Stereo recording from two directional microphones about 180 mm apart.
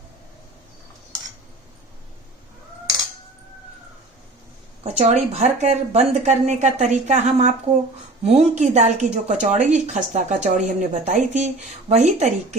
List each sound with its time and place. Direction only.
4.8 s speech: 40° right (ahead or behind)